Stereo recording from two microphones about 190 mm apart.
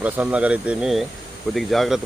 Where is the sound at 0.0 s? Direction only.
5° right (ahead or behind).